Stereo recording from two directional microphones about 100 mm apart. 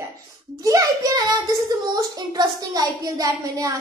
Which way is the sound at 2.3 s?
40° right (ahead or behind).